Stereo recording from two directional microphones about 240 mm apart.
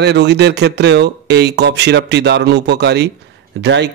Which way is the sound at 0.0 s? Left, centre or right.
Right.